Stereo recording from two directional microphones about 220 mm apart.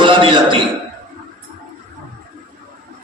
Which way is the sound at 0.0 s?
25° right (ahead or behind).